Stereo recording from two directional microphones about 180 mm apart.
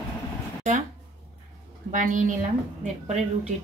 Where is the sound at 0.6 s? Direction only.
45° right (ahead or behind).